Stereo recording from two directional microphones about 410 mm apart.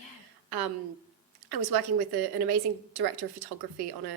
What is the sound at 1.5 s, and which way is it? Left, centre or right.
A woman's voice, right.